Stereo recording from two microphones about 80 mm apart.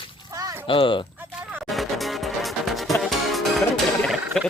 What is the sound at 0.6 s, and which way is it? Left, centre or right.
Speech, left.